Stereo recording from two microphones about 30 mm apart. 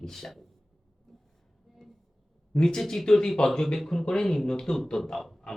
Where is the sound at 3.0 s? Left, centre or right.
Centre.